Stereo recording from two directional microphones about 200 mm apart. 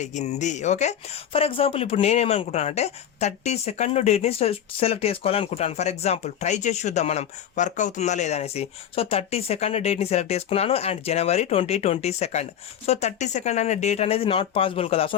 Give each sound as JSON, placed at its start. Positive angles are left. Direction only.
{"t": 0.0, "sound": "speech", "side_deg": 35}